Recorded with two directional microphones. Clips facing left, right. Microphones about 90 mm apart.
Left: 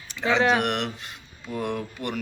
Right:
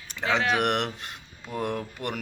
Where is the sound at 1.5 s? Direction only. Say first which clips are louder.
Left 1 dB; 40° right (ahead or behind).